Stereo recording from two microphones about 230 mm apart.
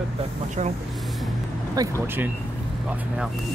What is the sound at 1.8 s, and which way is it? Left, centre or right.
Speech, centre.